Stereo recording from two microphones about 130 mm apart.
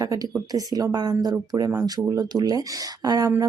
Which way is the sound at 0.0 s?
25° right (ahead or behind).